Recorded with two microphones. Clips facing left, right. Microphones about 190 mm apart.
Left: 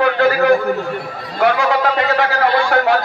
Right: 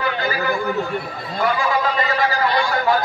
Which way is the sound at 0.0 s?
70° left (ahead or behind).